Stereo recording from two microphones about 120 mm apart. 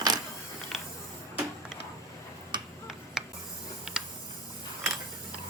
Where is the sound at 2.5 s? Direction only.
40° right (ahead or behind).